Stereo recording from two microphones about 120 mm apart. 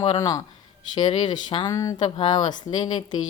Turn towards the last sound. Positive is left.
turn(degrees=40)  # may be behind; listen again after turning